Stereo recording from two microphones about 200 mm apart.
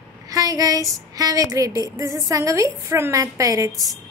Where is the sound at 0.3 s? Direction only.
20° right (ahead or behind).